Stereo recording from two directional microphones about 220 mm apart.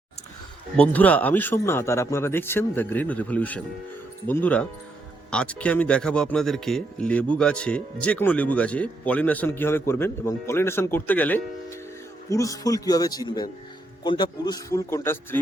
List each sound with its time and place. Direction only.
0.8 s speech: 5° left (ahead or behind)